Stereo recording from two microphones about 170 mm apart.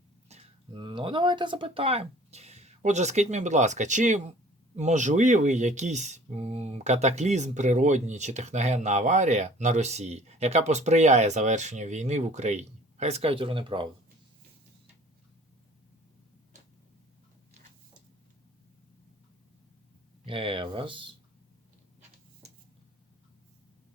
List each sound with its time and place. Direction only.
0.3 s a sound: 40° right (ahead or behind)
0.8 s speech: 30° right (ahead or behind)
20.2 s speech: 30° right (ahead or behind)